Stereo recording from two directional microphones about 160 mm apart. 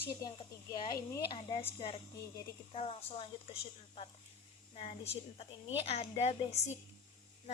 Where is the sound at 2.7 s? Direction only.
40° left (ahead or behind).